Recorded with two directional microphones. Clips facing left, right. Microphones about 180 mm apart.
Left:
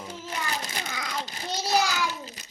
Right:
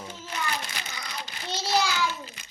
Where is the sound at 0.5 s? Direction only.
40° left (ahead or behind).